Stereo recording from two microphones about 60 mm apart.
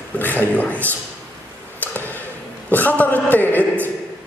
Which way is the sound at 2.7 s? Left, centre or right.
Left.